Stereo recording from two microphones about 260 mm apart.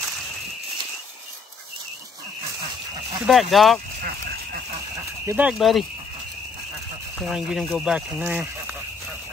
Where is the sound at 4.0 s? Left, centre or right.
Right.